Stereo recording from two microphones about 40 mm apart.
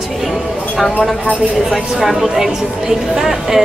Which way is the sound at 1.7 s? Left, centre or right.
Centre.